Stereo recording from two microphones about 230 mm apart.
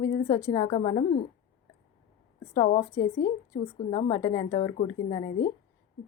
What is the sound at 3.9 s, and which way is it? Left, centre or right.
A woman's voice, centre.